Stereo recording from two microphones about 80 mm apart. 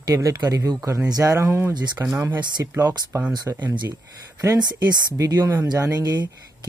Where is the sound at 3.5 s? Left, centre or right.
Right.